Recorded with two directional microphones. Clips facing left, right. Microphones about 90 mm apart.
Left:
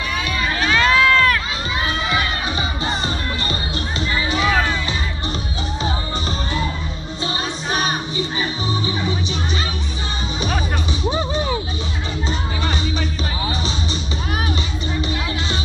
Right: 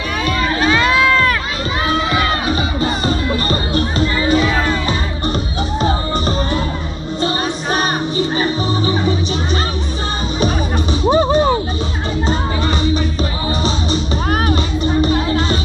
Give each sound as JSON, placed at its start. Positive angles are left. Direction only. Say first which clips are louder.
{"t": 0.7, "sound": "run", "louder": "right 1 dB", "side_deg": -15}
{"t": 4.3, "sound": "music", "louder": "right 2 dB", "side_deg": -45}
{"t": 11.1, "sound": "music", "louder": "right 10 dB", "side_deg": -55}
{"t": 14.3, "sound": "music", "louder": "right 7 dB", "side_deg": -50}